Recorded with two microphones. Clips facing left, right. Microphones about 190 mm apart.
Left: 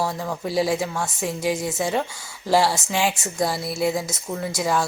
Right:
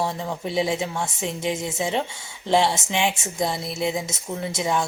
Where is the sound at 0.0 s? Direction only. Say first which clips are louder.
Left 1 dB; 25° right (ahead or behind).